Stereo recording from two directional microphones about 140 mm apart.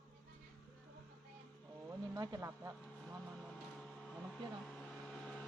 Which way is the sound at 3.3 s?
5° left (ahead or behind).